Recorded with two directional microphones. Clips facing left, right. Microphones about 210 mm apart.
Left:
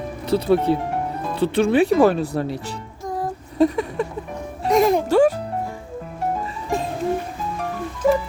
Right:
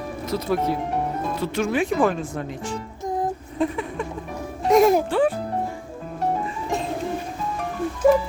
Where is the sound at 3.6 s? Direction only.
40° left (ahead or behind).